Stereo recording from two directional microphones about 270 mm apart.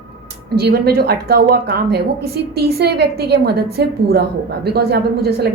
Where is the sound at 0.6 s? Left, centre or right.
Right.